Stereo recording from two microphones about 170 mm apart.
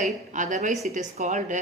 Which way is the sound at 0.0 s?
45° right (ahead or behind).